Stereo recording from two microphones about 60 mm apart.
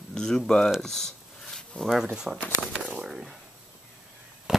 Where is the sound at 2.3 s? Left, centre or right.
Centre.